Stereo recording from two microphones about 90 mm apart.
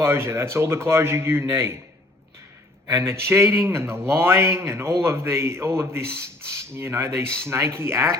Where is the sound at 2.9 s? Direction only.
30° right (ahead or behind).